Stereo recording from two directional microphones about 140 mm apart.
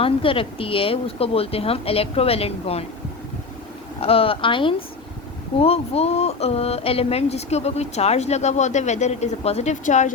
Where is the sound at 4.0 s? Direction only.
45° left (ahead or behind).